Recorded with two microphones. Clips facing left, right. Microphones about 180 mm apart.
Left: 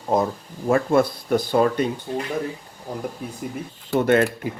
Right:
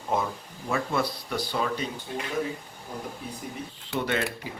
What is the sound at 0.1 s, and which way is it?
Speech, 35° left (ahead or behind).